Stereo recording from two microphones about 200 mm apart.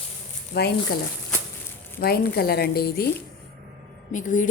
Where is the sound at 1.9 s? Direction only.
50° left (ahead or behind).